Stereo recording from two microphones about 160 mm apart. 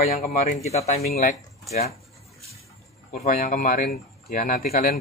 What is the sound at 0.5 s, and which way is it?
Speech, 45° left (ahead or behind).